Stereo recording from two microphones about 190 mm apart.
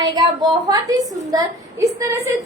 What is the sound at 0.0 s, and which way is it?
A woman's voice, 25° right (ahead or behind).